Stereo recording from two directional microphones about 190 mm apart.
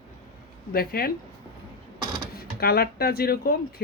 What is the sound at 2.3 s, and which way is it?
Speech, 55° left (ahead or behind).